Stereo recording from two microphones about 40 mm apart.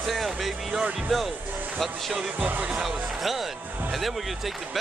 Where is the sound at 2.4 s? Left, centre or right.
Right.